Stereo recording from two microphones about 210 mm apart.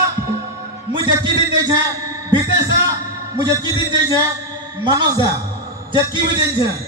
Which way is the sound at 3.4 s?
20° right (ahead or behind).